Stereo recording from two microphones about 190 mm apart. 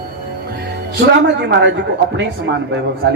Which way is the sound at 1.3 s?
65° right (ahead or behind).